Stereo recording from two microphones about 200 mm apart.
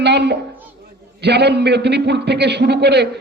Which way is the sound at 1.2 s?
55° right (ahead or behind).